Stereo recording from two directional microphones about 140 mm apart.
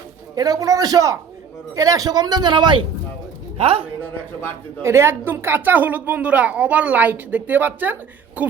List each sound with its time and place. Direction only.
0.3 s a man's voice: 25° right (ahead or behind)
3.6 s a man's voice: 45° right (ahead or behind)
4.8 s a woman's voice: 20° right (ahead or behind)